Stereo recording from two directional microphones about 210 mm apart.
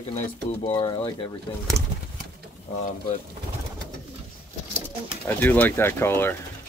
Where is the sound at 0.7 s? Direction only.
20° left (ahead or behind).